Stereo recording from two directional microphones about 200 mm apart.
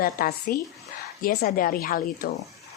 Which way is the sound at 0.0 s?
45° left (ahead or behind).